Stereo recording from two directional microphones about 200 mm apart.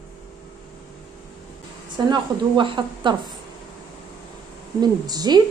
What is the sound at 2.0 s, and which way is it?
A woman's voice, 20° right (ahead or behind).